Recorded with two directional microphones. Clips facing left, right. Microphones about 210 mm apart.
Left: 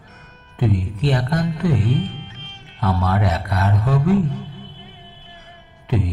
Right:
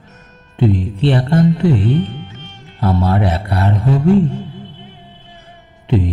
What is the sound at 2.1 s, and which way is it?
Music, 45° right (ahead or behind).